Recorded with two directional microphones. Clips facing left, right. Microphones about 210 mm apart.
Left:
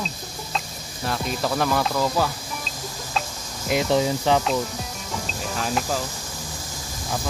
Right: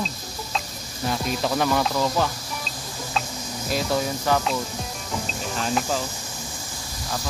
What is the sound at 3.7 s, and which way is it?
Speech, 20° left (ahead or behind).